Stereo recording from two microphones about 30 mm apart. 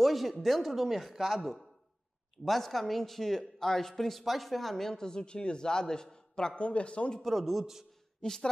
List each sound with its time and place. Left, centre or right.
0.0 s speech: centre
4.2 s speech: centre
4.9 s a man's voice: left
6.6 s speech: left
7.2 s speech: centre
8.2 s a man's voice: left